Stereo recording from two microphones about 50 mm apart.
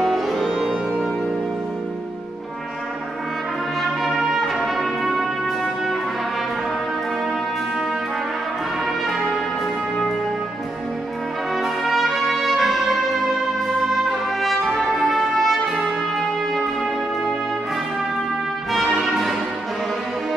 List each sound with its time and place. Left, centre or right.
0.0 s music: centre
3.8 s brass instrument: centre
11.5 s brass instrument: centre
13.9 s brass instrument: centre
18.9 s music: centre